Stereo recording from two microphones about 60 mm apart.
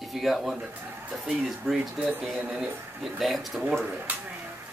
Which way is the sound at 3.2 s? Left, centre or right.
Centre.